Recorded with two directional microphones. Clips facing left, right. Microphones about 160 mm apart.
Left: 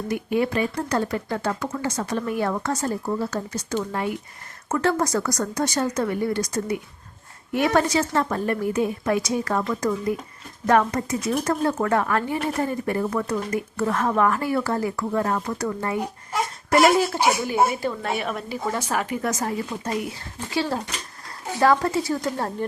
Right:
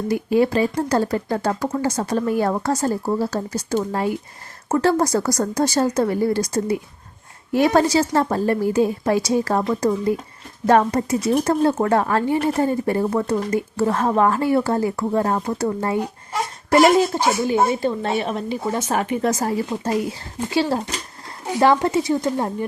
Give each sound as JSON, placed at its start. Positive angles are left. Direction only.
{"t": 0.1, "sound": "speech", "side_deg": -35}
{"t": 16.3, "sound": "baby cry", "side_deg": 0}
{"t": 17.2, "sound": "speech", "side_deg": 15}
{"t": 17.7, "sound": "speech", "side_deg": -25}